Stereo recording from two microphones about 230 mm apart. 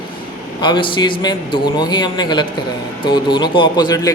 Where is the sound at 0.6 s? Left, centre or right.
Left.